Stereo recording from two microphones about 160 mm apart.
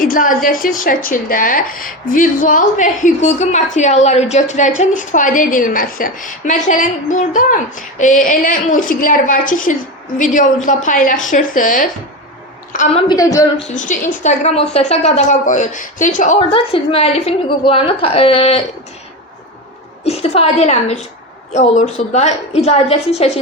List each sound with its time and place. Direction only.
0.0 s a woman's voice: 55° left (ahead or behind)
13.1 s speech: 20° left (ahead or behind)
13.6 s a woman's voice: 50° left (ahead or behind)
16.5 s a woman's voice: 35° left (ahead or behind)
20.1 s a woman's voice: 40° left (ahead or behind)